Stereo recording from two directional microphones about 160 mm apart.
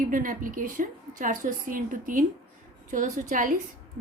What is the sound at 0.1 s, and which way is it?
A woman's voice, 60° right (ahead or behind).